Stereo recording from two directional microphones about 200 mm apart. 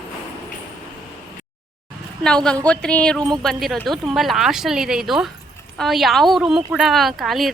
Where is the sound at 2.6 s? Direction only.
5° left (ahead or behind).